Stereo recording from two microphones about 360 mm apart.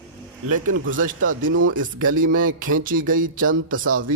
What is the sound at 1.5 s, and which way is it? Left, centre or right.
Speech, right.